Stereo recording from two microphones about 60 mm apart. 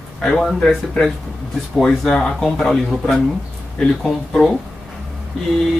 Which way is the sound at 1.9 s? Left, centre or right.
Centre.